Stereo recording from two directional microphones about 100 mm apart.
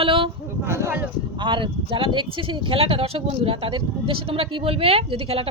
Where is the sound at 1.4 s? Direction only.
55° right (ahead or behind); by 5.4 s 75° right (ahead or behind).